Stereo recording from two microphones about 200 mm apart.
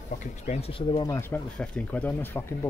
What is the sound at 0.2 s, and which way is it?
Speech, 30° left (ahead or behind).